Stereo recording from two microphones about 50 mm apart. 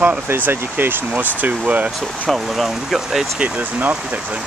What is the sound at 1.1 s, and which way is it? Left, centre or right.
Speech, right.